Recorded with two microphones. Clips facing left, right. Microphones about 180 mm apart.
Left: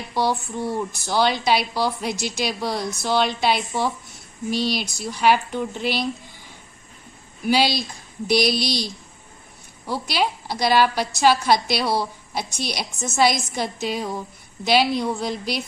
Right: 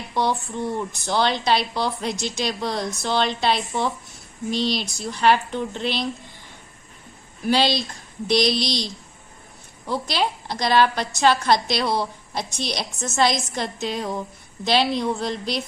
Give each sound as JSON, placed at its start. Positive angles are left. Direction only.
{"t": 0.1, "sound": "a woman's voice", "side_deg": 5}
{"t": 7.4, "sound": "a woman's voice", "side_deg": 0}